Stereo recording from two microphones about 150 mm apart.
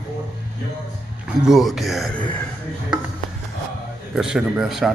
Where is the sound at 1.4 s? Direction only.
Centre (ahead or behind).